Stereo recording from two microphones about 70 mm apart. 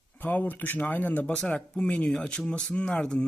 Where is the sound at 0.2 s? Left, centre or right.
Left.